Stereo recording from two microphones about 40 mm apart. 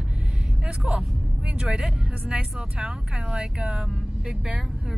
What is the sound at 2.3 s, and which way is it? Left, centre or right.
Speech, right.